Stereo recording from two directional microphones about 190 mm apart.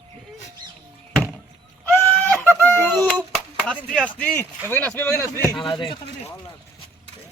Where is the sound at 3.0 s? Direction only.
5° left (ahead or behind).